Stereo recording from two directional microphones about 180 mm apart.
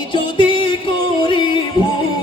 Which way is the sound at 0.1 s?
25° left (ahead or behind).